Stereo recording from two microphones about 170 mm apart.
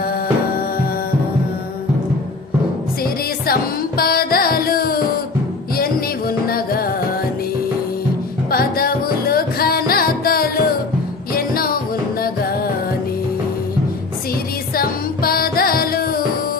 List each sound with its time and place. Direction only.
3.0 s music: 60° left (ahead or behind)
8.4 s music: 60° left (ahead or behind)
14.8 s music: 60° left (ahead or behind)